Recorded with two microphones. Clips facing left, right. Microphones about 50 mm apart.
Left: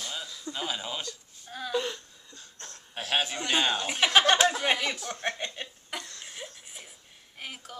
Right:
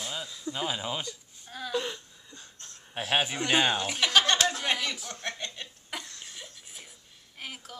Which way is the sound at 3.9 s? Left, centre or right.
Centre.